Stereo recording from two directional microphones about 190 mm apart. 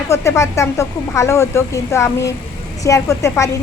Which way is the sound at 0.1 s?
15° left (ahead or behind).